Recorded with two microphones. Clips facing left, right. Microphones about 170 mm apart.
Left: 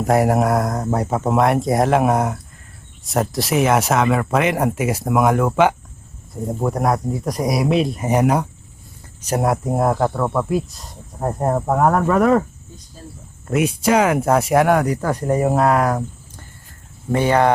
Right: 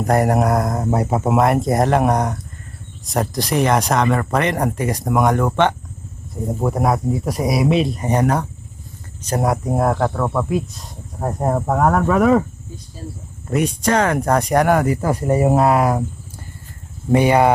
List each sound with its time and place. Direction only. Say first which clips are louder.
0.0 s speech: even; centre (ahead or behind)
13.5 s speech: left 1 dB; 5° left (ahead or behind)
17.1 s speech: right 2 dB; 15° right (ahead or behind)